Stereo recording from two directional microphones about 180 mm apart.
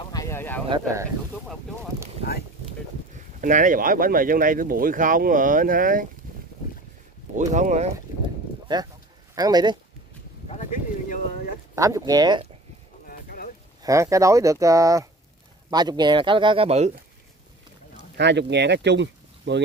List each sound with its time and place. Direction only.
0.0 s a sound: 20° left (ahead or behind)
3.3 s speech: 45° right (ahead or behind)
7.3 s speech: 40° right (ahead or behind)
8.7 s speech: 25° right (ahead or behind)
10.5 s a sound: 45° left (ahead or behind)
11.7 s speech: 20° right (ahead or behind)
13.0 s a sound: 55° left (ahead or behind)
13.8 s speech: 15° right (ahead or behind); by 16.9 s 35° right (ahead or behind)
18.1 s speech: 70° right (ahead or behind)